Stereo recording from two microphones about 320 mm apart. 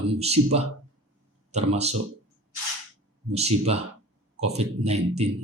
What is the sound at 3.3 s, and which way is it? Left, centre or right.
Speech, centre.